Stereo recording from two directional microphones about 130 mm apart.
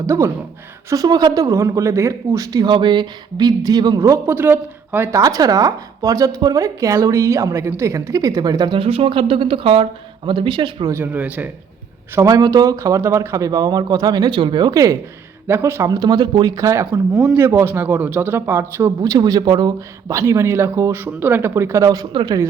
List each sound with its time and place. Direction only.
0.0 s a man's voice: 20° right (ahead or behind); by 10.9 s 40° right (ahead or behind)
10.9 s a man's voice: 15° right (ahead or behind)
12.1 s a man's voice: 25° right (ahead or behind)
15.9 s a man's voice: 30° right (ahead or behind)